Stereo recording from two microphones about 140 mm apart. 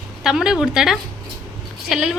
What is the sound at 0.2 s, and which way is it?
A woman's voice, 5° right (ahead or behind).